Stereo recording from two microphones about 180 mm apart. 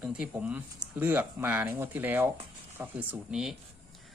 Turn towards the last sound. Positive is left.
turn(degrees=-5)  # may be behind; listen again after turning